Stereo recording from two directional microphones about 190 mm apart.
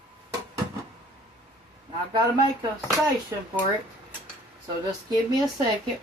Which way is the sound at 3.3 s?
15° right (ahead or behind).